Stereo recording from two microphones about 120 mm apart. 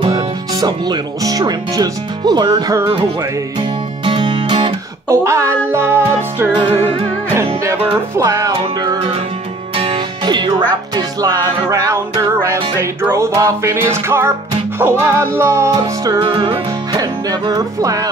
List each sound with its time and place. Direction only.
0.1 s speech: 35° right (ahead or behind)
4.0 s music: 45° right (ahead or behind)
5.0 s music: 25° right (ahead or behind)
6.5 s music: 50° right (ahead or behind)
8.2 s music: 25° right (ahead or behind)
9.8 s music: 45° right (ahead or behind)
16.2 s music: 45° right (ahead or behind)
16.9 s music: 30° right (ahead or behind)